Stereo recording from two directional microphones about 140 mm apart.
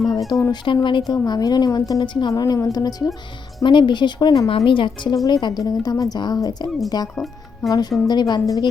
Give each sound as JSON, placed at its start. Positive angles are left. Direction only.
{"t": 0.3, "sound": "a woman's voice", "side_deg": 25}
{"t": 0.6, "sound": "a woman's voice", "side_deg": 35}